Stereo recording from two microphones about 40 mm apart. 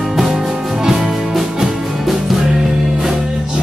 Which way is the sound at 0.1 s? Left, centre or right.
Centre.